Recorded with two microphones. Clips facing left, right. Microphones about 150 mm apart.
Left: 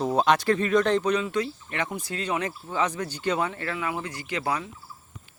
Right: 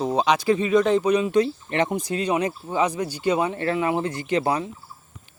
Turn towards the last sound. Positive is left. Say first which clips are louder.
# right 6 dB
turn(degrees=-25)  # may be behind; listen again after turning